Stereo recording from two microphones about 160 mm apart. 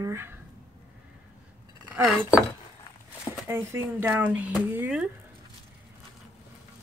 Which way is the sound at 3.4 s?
15° right (ahead or behind).